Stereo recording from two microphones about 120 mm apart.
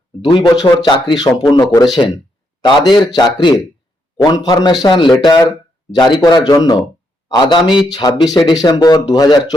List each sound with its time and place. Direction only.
0.2 s speech: 35° left (ahead or behind)